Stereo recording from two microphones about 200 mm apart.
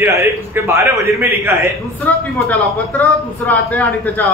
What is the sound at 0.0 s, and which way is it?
A man's voice, 15° right (ahead or behind).